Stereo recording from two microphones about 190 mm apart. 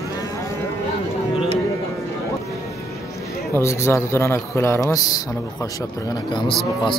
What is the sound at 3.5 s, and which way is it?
A man's voice, 15° left (ahead or behind).